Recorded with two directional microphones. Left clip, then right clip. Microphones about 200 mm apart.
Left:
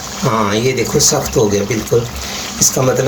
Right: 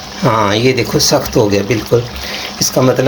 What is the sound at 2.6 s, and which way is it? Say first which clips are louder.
Speech: left 2 dB; 45° right (ahead or behind).